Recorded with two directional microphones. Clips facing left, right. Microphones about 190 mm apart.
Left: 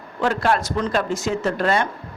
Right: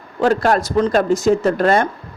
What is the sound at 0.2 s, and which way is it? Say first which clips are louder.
A man's voice: right 5 dB; 40° right (ahead or behind).